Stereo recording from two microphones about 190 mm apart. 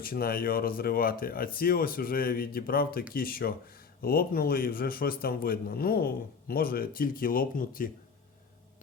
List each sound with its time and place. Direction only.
0.0 s a man's voice: 50° left (ahead or behind)